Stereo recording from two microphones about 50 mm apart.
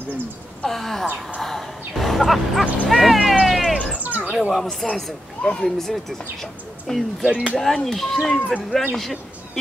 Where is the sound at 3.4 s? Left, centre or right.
Centre.